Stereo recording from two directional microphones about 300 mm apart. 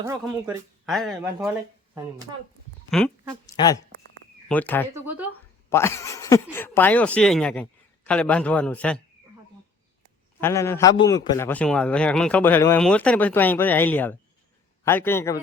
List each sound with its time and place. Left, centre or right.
0.0 s speech: centre
3.4 s a man's voice: centre
4.9 s speech: centre
5.7 s speech: centre
10.4 s a man's voice: centre